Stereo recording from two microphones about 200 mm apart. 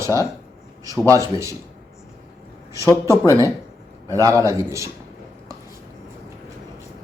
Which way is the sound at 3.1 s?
15° right (ahead or behind).